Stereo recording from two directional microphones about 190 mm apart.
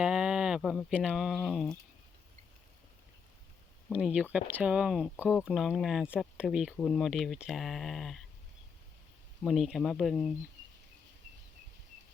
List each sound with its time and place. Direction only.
0.0 s speech: 5° right (ahead or behind)
3.9 s speech: 5° right (ahead or behind)
9.4 s speech: centre (ahead or behind)